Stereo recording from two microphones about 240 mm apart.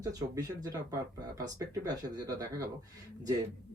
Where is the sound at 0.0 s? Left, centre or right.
Centre.